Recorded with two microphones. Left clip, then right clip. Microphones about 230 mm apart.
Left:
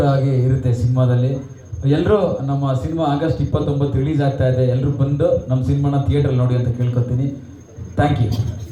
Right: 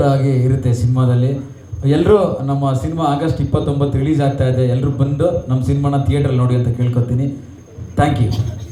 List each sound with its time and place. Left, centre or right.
0.0 s a man's voice: right
8.0 s a man's voice: right